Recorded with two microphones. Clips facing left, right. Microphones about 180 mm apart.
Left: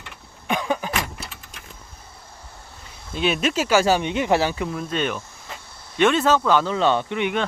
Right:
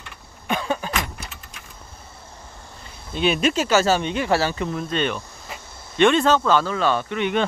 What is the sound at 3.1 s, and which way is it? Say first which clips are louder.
Speech: right 2 dB; centre (ahead or behind).